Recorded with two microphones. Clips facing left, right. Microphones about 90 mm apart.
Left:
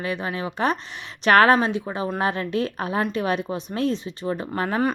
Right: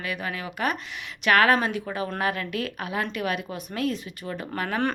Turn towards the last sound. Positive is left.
turn(degrees=30)  # may be behind; listen again after turning